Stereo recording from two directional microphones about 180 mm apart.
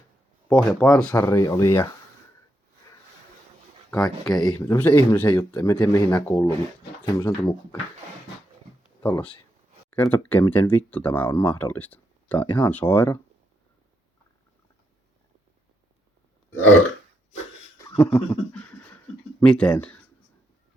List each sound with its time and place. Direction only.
0.4 s speech: 5° left (ahead or behind)
1.1 s speech: 15° left (ahead or behind)
3.9 s speech: 20° left (ahead or behind)
9.0 s speech: 15° left (ahead or behind)
17.8 s a sound: 15° left (ahead or behind)